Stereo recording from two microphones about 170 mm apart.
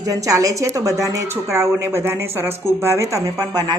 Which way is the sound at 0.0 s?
20° right (ahead or behind).